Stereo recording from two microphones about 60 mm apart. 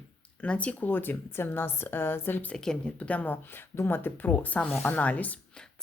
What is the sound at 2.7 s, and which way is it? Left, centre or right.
Speech, centre.